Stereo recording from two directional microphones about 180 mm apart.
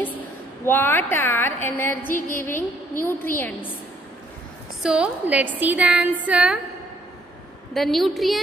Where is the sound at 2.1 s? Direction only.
50° left (ahead or behind).